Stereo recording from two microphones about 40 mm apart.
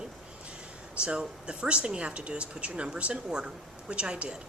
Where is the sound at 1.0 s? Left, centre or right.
Right.